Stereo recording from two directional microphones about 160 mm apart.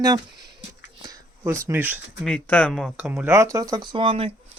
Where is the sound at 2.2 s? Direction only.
10° left (ahead or behind).